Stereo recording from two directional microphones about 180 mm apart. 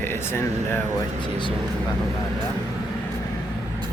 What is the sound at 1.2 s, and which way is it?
Speech, 25° left (ahead or behind).